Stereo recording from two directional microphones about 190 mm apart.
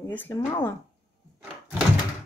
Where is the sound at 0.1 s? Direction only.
10° left (ahead or behind).